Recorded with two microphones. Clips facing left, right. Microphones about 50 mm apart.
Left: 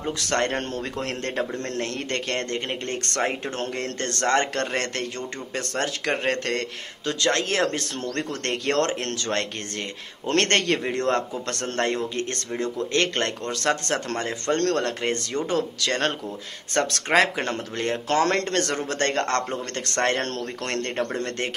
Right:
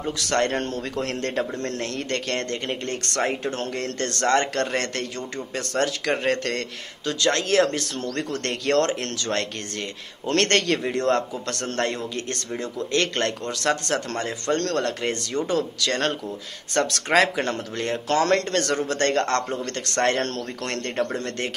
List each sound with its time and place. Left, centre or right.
0.0 s a man's voice: left
1.8 s speech: left
17.1 s speech: centre
20.9 s a man's voice: centre